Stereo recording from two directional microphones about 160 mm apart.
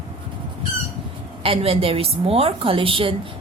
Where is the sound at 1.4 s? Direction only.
35° right (ahead or behind).